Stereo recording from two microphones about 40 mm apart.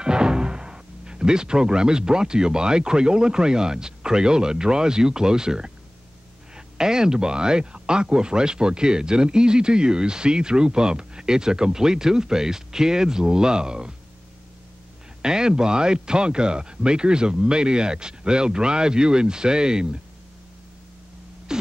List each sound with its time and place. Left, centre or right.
0.0 s speech: right
15.2 s speech: centre
21.5 s a sound: centre